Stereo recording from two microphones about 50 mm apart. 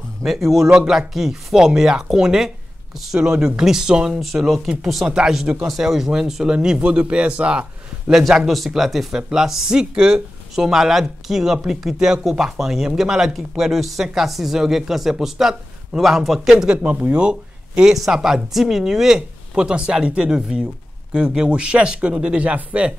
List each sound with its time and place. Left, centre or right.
0.2 s speech: centre
4.1 s speech: centre; by 7.6 s right
8.1 s speech: centre; by 22.9 s right